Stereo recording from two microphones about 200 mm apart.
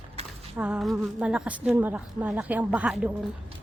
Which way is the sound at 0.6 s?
5° right (ahead or behind).